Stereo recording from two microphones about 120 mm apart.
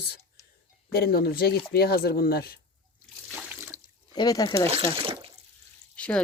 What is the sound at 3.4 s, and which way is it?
Water, 20° right (ahead or behind).